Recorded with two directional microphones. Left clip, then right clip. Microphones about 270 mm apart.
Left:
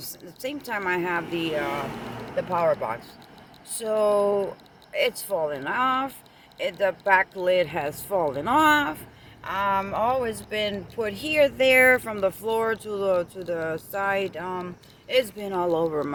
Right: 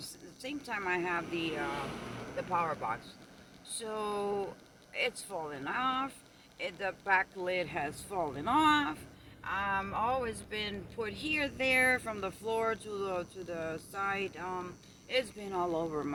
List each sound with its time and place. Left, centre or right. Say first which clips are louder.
0.4 s speech: left 8 dB; centre